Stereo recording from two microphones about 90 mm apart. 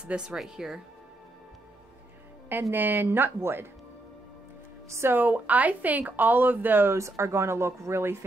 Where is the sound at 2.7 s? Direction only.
20° right (ahead or behind).